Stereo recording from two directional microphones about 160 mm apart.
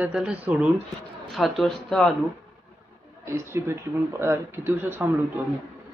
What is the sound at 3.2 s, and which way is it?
Speech, 15° right (ahead or behind).